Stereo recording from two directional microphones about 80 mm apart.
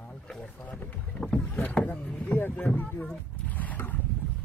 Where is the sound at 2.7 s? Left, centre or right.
Centre.